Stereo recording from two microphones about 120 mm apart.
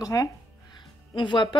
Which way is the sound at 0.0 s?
30° left (ahead or behind).